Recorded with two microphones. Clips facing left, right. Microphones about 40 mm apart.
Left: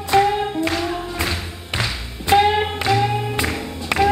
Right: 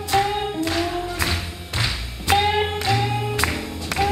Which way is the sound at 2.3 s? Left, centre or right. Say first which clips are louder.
Left 4 dB; centre.